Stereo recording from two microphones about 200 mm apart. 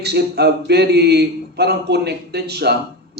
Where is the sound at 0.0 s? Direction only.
55° right (ahead or behind).